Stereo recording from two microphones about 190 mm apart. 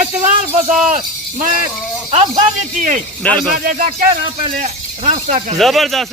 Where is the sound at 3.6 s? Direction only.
45° right (ahead or behind).